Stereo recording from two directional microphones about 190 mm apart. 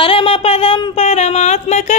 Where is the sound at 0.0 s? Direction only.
30° left (ahead or behind).